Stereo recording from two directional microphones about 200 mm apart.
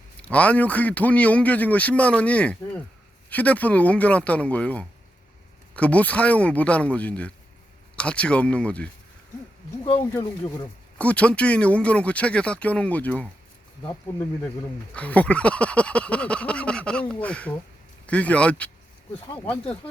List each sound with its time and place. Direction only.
0.2 s a man's voice: 5° left (ahead or behind)
10.2 s speech: 20° left (ahead or behind)
10.9 s a man's voice: 5° left (ahead or behind)
14.9 s a man's voice: 5° left (ahead or behind)
19.3 s speech: 20° left (ahead or behind)